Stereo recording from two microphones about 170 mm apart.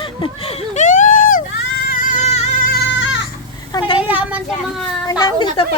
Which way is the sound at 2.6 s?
90° left.